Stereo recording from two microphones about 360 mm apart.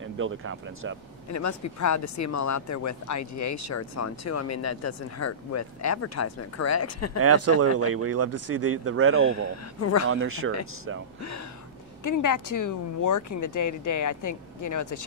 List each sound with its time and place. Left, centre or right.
0.0 s speech: right
1.3 s speech: left
7.2 s speech: right
9.3 s speech: left
10.0 s speech: right
12.0 s speech: left